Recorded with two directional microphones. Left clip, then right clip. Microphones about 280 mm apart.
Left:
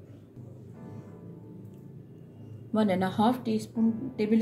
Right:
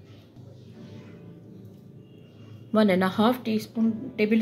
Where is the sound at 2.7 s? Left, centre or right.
Right.